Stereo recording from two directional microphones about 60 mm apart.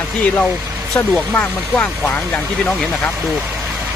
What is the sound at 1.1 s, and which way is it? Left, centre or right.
Speech, centre.